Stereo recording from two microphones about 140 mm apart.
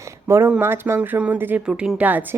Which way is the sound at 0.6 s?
15° right (ahead or behind).